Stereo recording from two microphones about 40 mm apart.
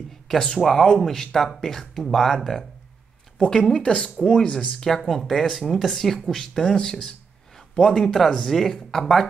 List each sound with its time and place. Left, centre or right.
0.3 s speech: centre
3.3 s speech: centre